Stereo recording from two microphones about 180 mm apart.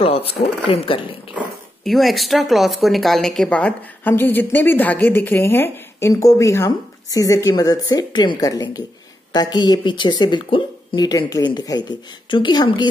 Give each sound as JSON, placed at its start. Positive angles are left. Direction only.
{"t": 0.0, "sound": "speech", "side_deg": 30}
{"t": 1.9, "sound": "a woman's voice", "side_deg": 0}